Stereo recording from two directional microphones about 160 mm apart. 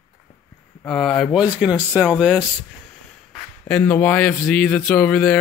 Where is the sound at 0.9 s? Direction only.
5° left (ahead or behind).